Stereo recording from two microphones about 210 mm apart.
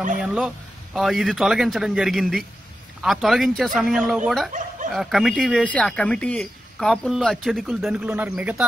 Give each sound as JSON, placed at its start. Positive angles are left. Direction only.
{"t": 0.2, "sound": "speech", "side_deg": 0}
{"t": 4.5, "sound": "dog", "side_deg": -35}
{"t": 4.9, "sound": "speech", "side_deg": 0}